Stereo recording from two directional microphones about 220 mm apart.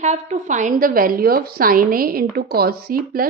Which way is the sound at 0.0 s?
30° right (ahead or behind).